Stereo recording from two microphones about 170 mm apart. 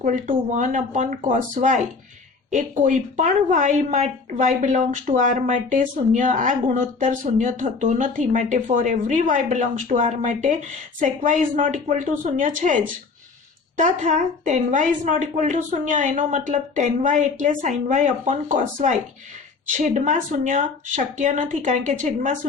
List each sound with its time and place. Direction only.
0.0 s speech: 45° right (ahead or behind)